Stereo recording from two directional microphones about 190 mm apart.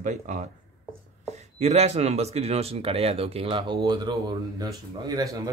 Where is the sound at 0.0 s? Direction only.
40° right (ahead or behind).